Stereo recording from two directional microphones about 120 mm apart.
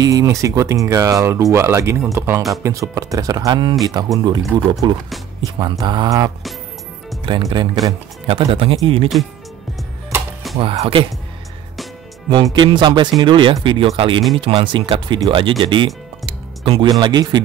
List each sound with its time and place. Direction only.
0.0 s speech: 30° right (ahead or behind)
7.3 s speech: 45° right (ahead or behind)
10.6 s speech: 50° right (ahead or behind)
12.5 s speech: 40° right (ahead or behind)
16.3 s music: 40° right (ahead or behind)
17.0 s speech: 35° right (ahead or behind)